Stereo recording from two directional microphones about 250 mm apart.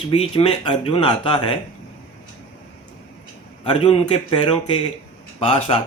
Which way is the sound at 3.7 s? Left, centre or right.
Left.